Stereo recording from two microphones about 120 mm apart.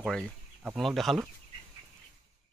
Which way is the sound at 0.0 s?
5° left (ahead or behind).